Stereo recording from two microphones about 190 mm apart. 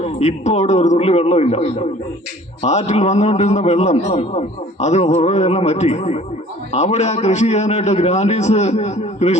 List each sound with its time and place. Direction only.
0.0 s a man's voice: 35° left (ahead or behind)